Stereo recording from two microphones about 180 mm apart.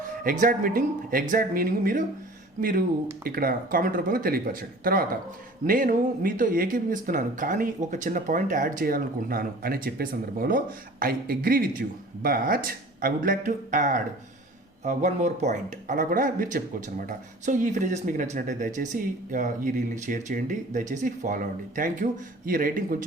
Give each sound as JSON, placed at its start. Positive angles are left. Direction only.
{"t": 0.0, "sound": "speech", "side_deg": -50}